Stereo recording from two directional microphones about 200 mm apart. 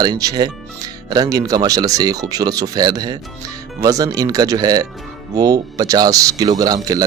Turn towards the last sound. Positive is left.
turn(degrees=-20)  # may be behind; listen again after turning